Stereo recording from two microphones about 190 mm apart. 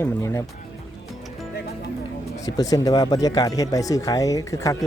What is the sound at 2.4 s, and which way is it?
Speech, 20° left (ahead or behind).